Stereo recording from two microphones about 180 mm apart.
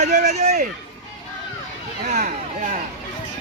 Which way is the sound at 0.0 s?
40° right (ahead or behind).